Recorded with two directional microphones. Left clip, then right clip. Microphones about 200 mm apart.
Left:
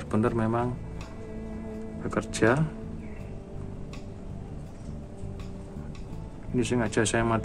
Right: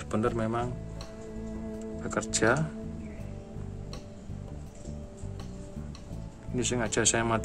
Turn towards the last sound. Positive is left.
turn(degrees=-15)  # may be behind; listen again after turning